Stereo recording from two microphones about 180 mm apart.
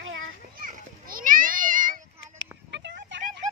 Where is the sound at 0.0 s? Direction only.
90° right.